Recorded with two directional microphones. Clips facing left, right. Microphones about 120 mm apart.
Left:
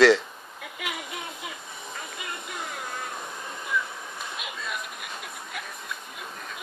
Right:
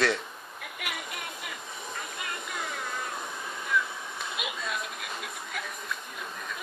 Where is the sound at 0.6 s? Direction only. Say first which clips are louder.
Left 3 dB; 20° left (ahead or behind).